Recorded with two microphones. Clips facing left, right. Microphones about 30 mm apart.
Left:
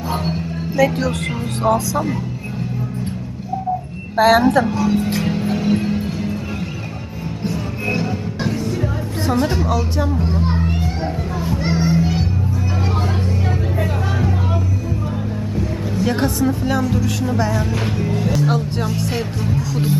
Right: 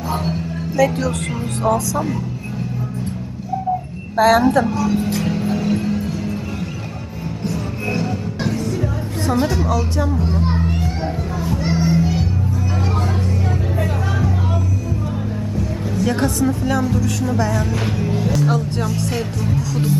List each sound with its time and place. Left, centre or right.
0.8 s speech: centre
4.2 s speech: centre
5.0 s music: centre
7.4 s music: centre
9.6 s speech: centre
10.2 s children playing: centre
13.7 s music: centre
16.9 s speech: centre
18.4 s speech: centre